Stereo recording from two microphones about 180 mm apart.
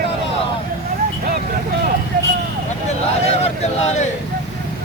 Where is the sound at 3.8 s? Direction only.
40° left (ahead or behind).